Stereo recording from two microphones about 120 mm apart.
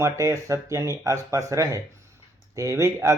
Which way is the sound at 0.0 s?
25° right (ahead or behind).